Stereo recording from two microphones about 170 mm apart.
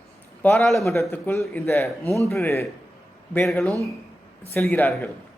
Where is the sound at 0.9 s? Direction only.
15° left (ahead or behind).